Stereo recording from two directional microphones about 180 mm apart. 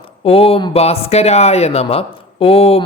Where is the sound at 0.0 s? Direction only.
30° left (ahead or behind).